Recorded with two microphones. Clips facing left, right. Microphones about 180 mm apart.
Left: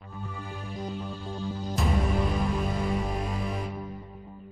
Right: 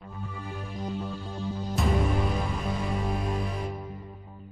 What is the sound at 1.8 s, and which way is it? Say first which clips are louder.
Music: right 2 dB; centre (ahead or behind).